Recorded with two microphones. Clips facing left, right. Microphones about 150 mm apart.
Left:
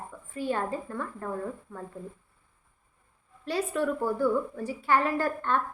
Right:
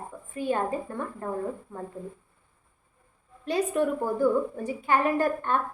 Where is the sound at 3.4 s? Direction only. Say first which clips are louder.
Right 3 dB; 15° right (ahead or behind).